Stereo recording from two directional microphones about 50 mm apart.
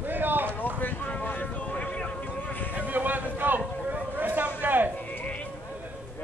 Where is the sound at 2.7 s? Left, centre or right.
Right.